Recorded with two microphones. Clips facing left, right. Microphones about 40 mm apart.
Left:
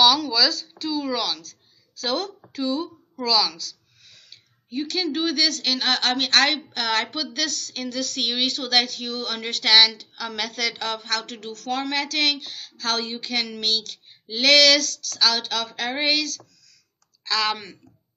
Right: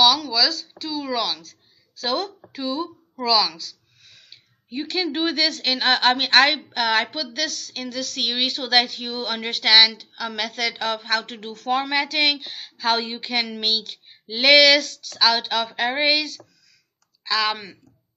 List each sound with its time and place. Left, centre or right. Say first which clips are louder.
0.0 s a woman's voice: even; centre